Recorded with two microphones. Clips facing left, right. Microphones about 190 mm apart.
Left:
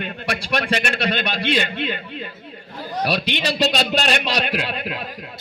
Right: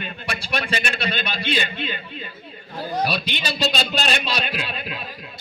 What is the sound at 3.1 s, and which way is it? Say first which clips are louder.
A man's voice: left 4 dB; 80° left.